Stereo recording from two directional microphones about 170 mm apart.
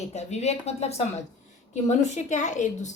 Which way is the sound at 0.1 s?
40° left (ahead or behind).